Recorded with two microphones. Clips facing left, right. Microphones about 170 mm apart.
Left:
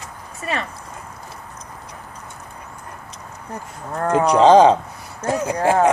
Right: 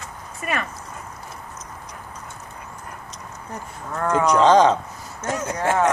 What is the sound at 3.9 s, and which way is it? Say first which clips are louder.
A woman's voice: left 2 dB; 35° left (ahead or behind).